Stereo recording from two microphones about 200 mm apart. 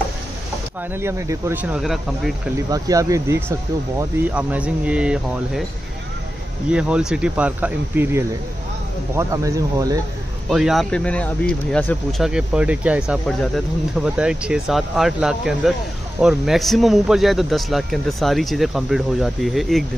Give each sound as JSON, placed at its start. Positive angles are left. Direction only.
{"t": 0.9, "sound": "speech", "side_deg": -15}
{"t": 2.7, "sound": "speech", "side_deg": -15}
{"t": 6.7, "sound": "speech", "side_deg": -5}
{"t": 10.5, "sound": "a man's voice", "side_deg": 0}